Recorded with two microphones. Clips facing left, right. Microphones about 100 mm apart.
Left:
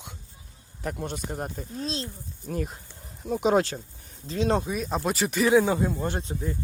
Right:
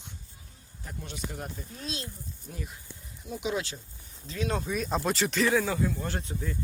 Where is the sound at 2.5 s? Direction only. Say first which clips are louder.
Left 11 dB; 50° left (ahead or behind).